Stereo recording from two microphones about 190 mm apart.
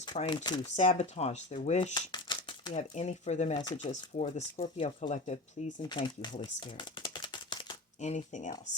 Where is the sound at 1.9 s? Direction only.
25° left (ahead or behind).